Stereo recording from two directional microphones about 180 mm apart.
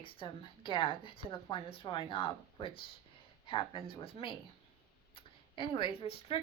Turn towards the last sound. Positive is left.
turn(degrees=30)  # may be behind; listen again after turning